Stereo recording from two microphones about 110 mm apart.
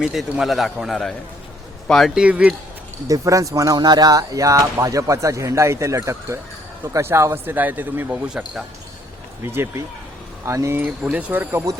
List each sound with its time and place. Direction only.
0.0 s a man's voice: 5° right (ahead or behind)
2.2 s speech: 10° right (ahead or behind)
3.1 s speech: 30° right (ahead or behind)
8.3 s a man's voice: 5° right (ahead or behind)
9.4 s speech: 20° right (ahead or behind)